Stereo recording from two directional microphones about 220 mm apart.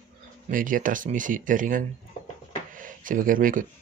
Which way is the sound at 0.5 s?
40° right (ahead or behind).